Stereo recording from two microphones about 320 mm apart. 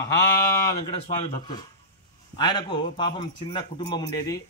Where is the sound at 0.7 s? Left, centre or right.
Centre.